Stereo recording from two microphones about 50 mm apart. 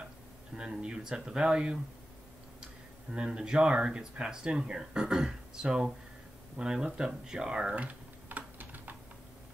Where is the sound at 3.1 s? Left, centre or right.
Centre.